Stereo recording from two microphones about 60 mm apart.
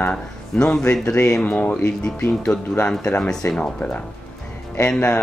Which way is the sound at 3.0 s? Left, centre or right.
Left.